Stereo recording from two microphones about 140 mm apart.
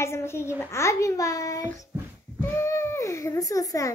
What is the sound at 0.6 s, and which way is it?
A child's voice, 20° left (ahead or behind).